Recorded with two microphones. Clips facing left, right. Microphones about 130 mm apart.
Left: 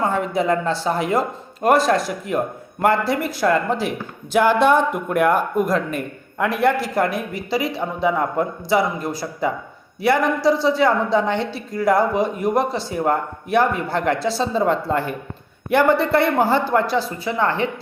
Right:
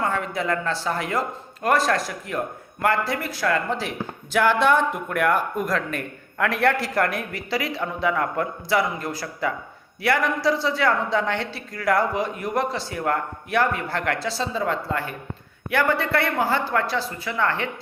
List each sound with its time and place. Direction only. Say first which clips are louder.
0.0 s a man's voice: left 5 dB; 20° left (ahead or behind)
3.1 s a man's voice: left 5 dB; 25° left (ahead or behind); by 7.6 s 5° left (ahead or behind)
7.7 s a man's voice: left 3 dB; 20° left (ahead or behind)
14.2 s speech: left 6 dB; 65° left (ahead or behind)
15.7 s a man's voice: left 6 dB; 25° left (ahead or behind)